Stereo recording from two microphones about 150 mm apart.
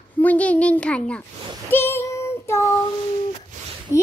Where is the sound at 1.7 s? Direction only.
15° left (ahead or behind).